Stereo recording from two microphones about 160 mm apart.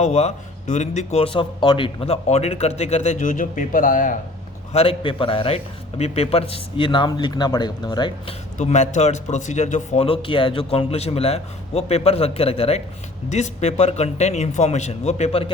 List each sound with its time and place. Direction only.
0.0 s a man's voice: 45° left (ahead or behind)
4.7 s a man's voice: 35° left (ahead or behind)
8.5 s a man's voice: 45° left (ahead or behind)